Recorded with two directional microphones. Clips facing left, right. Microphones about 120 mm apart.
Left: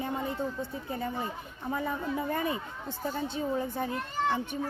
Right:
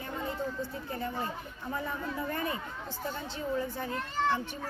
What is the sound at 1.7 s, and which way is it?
A child's voice, 25° left (ahead or behind).